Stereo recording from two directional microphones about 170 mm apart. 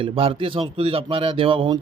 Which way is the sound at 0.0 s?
30° right (ahead or behind).